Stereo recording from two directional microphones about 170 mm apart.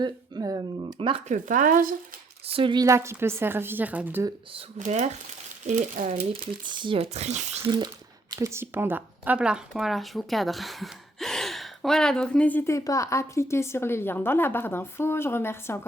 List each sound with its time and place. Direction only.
0.0 s speech: 20° right (ahead or behind)
1.3 s speech: 50° right (ahead or behind)
2.5 s a woman's voice: 30° right (ahead or behind); by 4.3 s 10° right (ahead or behind)
4.8 s speech: 45° right (ahead or behind)
6.7 s speech: 30° right (ahead or behind)
7.6 s speech: 25° right (ahead or behind); by 15.9 s 15° left (ahead or behind)